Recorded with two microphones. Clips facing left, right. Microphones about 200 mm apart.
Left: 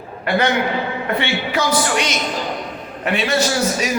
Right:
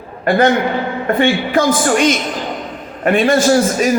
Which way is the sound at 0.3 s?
50° right (ahead or behind).